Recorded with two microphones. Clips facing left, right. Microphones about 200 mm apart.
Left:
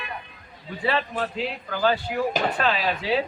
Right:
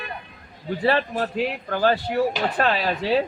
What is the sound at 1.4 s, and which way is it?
Speech, 55° right (ahead or behind).